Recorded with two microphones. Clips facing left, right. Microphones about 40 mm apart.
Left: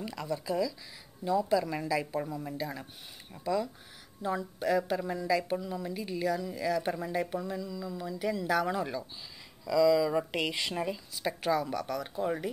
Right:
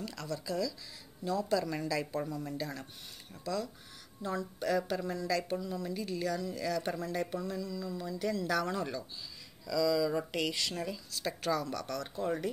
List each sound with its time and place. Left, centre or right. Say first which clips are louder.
0.0 s speech: left 4 dB; centre